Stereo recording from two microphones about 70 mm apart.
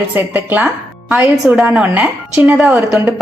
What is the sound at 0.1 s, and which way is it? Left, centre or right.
A woman's voice, right.